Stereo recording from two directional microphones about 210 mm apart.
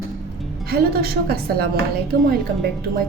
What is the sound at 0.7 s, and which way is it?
Speech, 45° right (ahead or behind).